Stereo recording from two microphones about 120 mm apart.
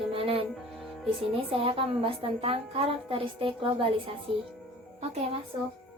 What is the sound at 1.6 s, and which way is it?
A woman's voice, 50° right (ahead or behind).